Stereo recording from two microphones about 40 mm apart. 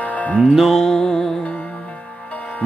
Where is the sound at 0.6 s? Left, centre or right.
Centre.